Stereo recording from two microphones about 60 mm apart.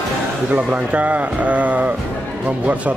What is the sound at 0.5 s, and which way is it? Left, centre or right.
Speech, right.